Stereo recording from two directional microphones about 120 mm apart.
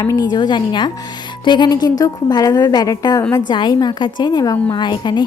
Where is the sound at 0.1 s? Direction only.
35° left (ahead or behind).